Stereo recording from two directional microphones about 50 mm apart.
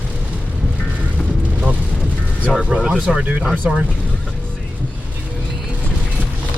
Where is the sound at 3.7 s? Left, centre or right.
Right.